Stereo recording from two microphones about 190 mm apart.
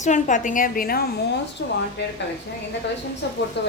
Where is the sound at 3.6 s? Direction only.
65° left (ahead or behind).